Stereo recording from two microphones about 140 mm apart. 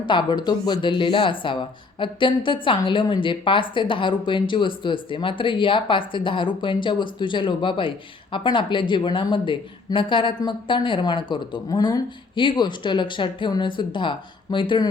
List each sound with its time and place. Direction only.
0.0 s speech: 35° left (ahead or behind)